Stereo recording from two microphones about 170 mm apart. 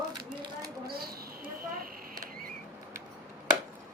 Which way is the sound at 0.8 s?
65° right (ahead or behind).